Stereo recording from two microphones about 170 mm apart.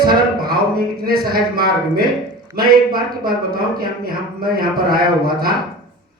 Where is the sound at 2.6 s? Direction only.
60° right (ahead or behind).